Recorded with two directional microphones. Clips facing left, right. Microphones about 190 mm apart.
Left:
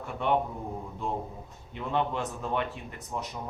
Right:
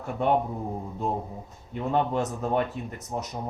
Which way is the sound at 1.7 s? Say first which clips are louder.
Right 4 dB; 40° right (ahead or behind).